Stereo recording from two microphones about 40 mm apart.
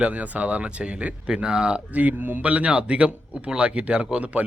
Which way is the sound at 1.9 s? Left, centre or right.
Right.